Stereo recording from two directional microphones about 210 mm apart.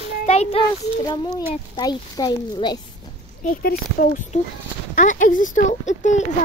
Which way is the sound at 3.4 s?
45° left (ahead or behind).